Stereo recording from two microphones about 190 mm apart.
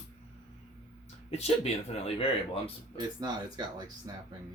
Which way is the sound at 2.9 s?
20° right (ahead or behind).